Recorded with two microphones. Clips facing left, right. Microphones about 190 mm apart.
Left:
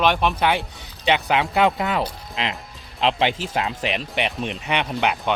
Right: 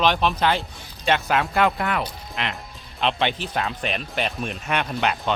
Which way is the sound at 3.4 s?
90° left.